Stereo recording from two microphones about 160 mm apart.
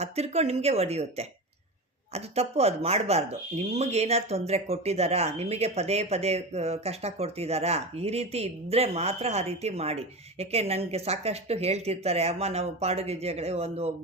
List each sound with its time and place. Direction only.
0.0 s speech: 40° right (ahead or behind)